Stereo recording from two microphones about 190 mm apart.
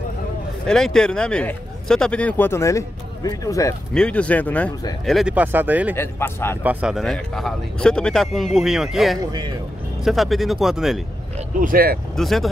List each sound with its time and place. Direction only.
0.7 s speech: 5° left (ahead or behind)
3.9 s speech: 5° left (ahead or behind)
5.9 s speech: 15° left (ahead or behind)
6.6 s speech: 5° right (ahead or behind)
11.6 s speech: 50° right (ahead or behind)
12.2 s speech: centre (ahead or behind)